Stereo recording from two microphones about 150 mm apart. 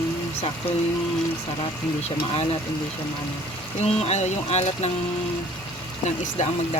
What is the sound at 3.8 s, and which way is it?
Speech, 45° left (ahead or behind).